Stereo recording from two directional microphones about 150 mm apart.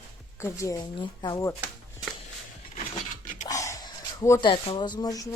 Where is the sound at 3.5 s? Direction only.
20° left (ahead or behind).